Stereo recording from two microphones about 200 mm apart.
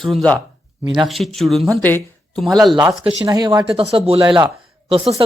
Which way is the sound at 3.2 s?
20° right (ahead or behind).